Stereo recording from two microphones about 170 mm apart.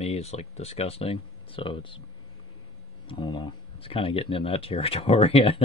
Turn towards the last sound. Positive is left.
turn(degrees=35)  # may be behind; listen again after turning